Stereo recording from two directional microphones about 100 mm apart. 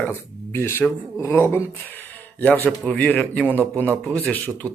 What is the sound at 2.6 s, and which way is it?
Speech, 10° left (ahead or behind).